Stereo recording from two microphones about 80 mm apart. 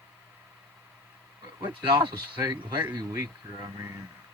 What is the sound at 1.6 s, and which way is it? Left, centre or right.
Speech, right.